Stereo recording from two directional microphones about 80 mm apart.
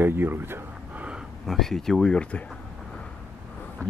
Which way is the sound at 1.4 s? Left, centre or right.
Centre.